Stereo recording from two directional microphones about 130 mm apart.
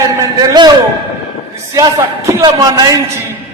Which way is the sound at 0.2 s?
30° right (ahead or behind).